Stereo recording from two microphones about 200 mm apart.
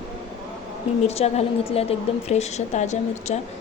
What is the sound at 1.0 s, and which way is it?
A woman's voice, 30° left (ahead or behind).